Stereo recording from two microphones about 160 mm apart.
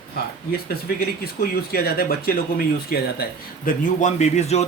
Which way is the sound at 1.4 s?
70° left (ahead or behind).